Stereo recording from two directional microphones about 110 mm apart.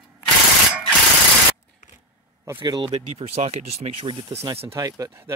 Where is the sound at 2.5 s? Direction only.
45° right (ahead or behind).